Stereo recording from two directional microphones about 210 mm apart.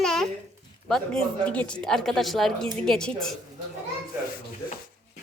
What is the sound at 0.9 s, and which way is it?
Speech, 5° left (ahead or behind).